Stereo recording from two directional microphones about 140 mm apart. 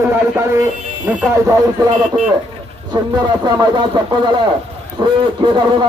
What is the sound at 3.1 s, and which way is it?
Speech, 30° right (ahead or behind).